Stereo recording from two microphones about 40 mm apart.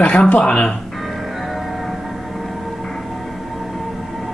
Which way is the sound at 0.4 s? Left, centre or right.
Left.